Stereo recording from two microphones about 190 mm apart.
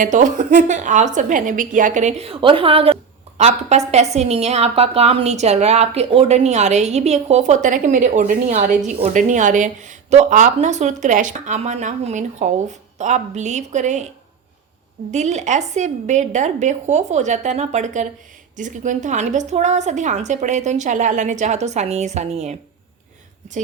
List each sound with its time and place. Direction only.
0.0 s a woman's voice: 40° right (ahead or behind)
15.1 s a woman's voice: 40° right (ahead or behind)